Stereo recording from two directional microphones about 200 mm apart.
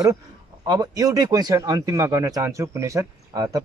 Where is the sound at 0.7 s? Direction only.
20° right (ahead or behind).